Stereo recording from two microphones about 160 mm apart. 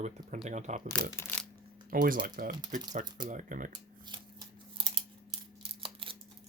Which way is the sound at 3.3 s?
55° right (ahead or behind).